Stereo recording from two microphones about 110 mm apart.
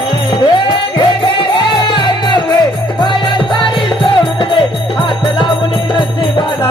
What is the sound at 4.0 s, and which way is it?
Music, 55° left (ahead or behind).